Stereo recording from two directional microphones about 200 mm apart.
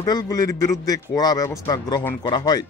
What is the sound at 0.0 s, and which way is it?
Speech, 20° left (ahead or behind).